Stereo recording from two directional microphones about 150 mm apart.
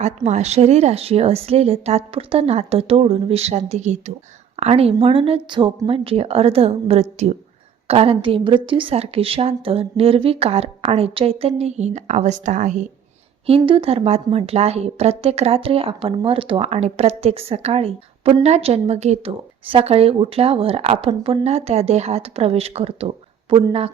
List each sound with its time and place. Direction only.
0.0 s a woman's voice: 50° right (ahead or behind)
13.5 s a woman's voice: 35° right (ahead or behind)